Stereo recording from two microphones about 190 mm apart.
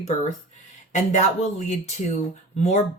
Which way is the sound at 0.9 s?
40° left (ahead or behind).